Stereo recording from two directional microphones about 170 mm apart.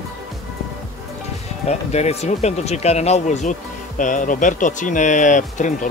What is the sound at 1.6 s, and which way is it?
Speech, 40° left (ahead or behind).